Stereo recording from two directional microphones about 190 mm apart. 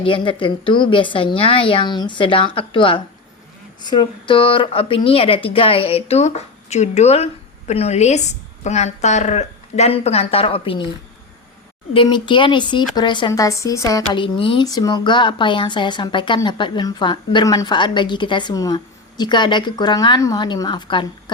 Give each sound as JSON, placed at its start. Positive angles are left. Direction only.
{"t": 0.0, "sound": "a woman's voice", "side_deg": 25}
{"t": 11.9, "sound": "speech", "side_deg": 25}